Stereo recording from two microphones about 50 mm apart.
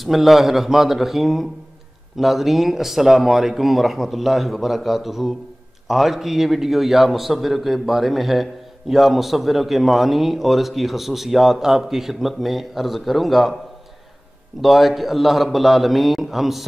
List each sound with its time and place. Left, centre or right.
0.0 s a man's voice: centre
14.6 s a man's voice: centre